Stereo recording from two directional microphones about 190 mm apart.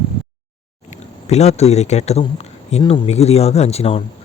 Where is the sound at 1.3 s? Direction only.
35° left (ahead or behind).